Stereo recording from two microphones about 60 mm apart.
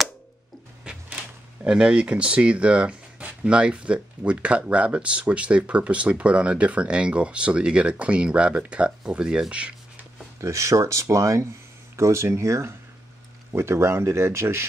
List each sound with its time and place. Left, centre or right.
0.8 s speech: centre
10.4 s speech: right